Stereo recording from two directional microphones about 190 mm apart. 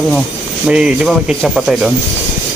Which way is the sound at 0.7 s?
5° right (ahead or behind).